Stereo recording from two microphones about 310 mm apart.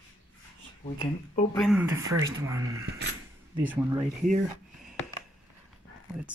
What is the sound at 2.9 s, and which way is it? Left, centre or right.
Speech, right.